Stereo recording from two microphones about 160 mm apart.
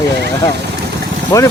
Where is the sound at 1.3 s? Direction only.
20° left (ahead or behind).